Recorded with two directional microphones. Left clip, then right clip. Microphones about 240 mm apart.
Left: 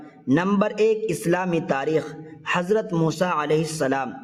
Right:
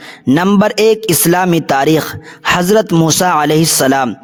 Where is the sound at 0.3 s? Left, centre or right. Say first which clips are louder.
Right 9 dB; right.